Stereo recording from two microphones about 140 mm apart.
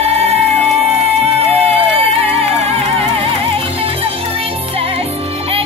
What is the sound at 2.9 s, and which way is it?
Music, 45° right (ahead or behind).